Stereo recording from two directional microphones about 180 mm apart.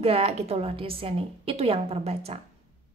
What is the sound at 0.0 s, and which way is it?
A woman's voice, 35° right (ahead or behind).